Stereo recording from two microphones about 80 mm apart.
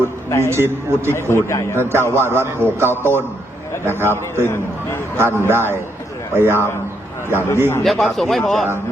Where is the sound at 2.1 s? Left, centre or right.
Right.